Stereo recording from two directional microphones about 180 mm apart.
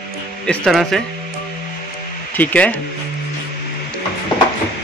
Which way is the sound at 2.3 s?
10° left (ahead or behind).